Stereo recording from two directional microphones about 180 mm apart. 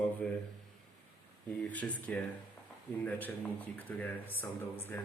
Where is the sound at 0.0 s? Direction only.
5° left (ahead or behind).